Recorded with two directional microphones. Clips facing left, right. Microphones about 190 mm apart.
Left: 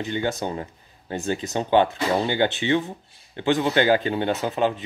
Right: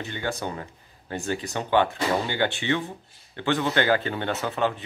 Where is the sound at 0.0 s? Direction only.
20° left (ahead or behind).